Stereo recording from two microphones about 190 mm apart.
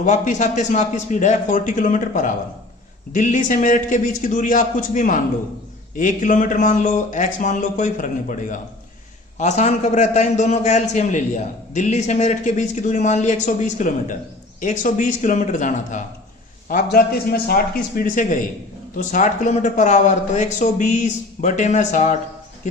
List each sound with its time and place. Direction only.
0.0 s a man's voice: 40° left (ahead or behind)